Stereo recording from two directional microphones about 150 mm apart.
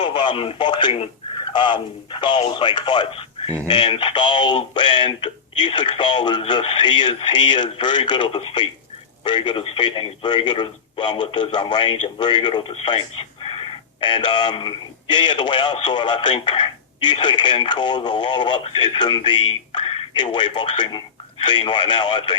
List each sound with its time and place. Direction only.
0.0 s speech: 30° left (ahead or behind)